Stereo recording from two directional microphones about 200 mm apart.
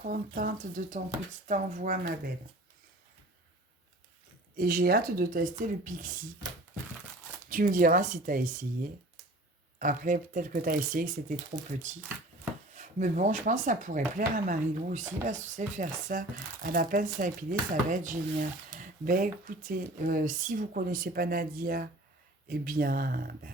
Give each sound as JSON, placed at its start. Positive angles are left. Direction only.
{"t": 0.0, "sound": "speech", "side_deg": -45}
{"t": 4.5, "sound": "speech", "side_deg": -45}
{"t": 7.5, "sound": "speech", "side_deg": -40}
{"t": 9.7, "sound": "speech", "side_deg": -40}
{"t": 12.7, "sound": "speech", "side_deg": -35}